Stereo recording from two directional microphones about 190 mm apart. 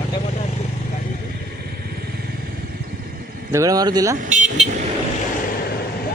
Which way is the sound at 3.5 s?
15° right (ahead or behind).